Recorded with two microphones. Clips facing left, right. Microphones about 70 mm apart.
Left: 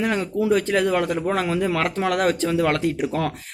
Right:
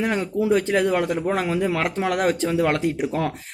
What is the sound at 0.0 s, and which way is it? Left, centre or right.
Speech, centre.